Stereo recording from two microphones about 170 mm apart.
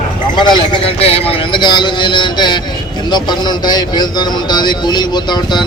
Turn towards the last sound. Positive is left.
turn(degrees=25)  # may be behind; listen again after turning